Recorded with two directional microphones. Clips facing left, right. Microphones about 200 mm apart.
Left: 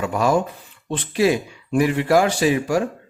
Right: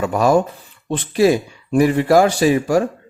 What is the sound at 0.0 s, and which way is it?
Speech, 40° right (ahead or behind).